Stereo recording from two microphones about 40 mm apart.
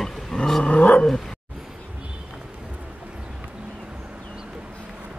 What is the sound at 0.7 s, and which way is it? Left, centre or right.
Dog, left.